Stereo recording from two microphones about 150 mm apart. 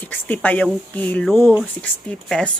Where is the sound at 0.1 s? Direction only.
10° left (ahead or behind).